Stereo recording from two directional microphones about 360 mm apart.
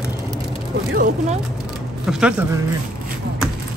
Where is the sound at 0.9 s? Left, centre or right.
Right.